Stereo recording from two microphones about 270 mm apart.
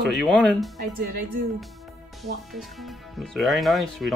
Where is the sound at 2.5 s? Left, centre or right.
Centre.